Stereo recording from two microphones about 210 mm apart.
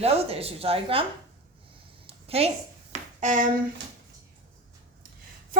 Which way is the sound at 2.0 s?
30° right (ahead or behind).